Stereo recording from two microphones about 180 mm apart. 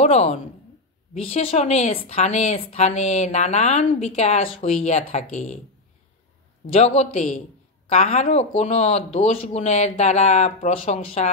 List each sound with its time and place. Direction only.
0.0 s speech: 35° left (ahead or behind)
6.6 s speech: 35° left (ahead or behind)